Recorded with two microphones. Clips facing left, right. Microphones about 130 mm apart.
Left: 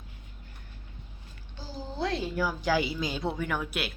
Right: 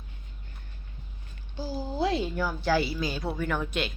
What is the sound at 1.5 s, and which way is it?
Speech, 10° right (ahead or behind).